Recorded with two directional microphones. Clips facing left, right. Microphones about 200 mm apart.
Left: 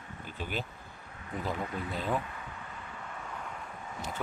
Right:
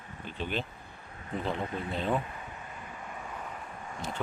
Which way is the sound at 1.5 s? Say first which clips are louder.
Right 2 dB; 25° right (ahead or behind).